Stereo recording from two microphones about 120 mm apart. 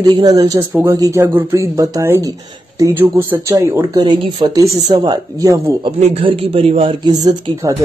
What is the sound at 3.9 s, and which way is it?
Speech, 35° right (ahead or behind).